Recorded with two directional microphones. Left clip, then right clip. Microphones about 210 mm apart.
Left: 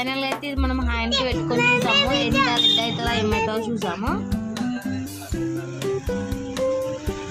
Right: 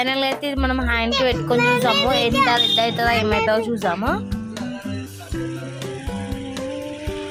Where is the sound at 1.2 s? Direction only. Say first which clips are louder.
Right 5 dB; 30° right (ahead or behind).